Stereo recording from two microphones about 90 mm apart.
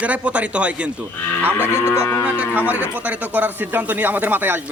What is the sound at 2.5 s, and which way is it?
A man's voice, 20° right (ahead or behind).